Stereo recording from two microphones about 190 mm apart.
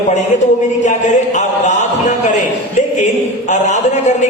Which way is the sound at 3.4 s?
40° left (ahead or behind).